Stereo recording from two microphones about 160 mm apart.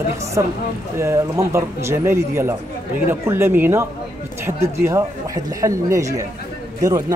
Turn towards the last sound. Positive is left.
turn(degrees=-20)  # may be behind; listen again after turning